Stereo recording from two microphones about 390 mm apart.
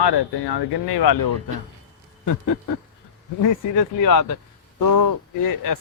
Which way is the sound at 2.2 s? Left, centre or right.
Left.